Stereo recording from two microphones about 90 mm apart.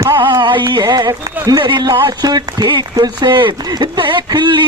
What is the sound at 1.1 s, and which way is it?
Speech, 45° right (ahead or behind).